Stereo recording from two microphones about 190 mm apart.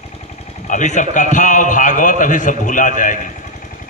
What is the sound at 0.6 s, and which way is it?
A man's voice, 40° left (ahead or behind).